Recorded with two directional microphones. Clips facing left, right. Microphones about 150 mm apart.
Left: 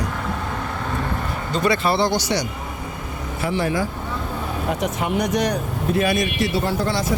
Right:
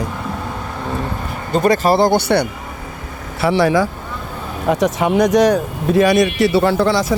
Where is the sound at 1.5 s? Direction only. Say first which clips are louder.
Right 6 dB; 50° right (ahead or behind).